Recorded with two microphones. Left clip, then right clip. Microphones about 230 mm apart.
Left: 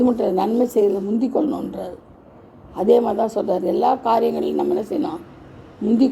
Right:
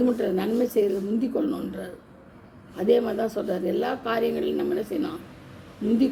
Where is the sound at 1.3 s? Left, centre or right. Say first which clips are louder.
Left 7 dB; left.